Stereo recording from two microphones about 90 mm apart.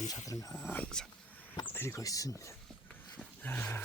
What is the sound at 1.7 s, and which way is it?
Speech, 30° left (ahead or behind).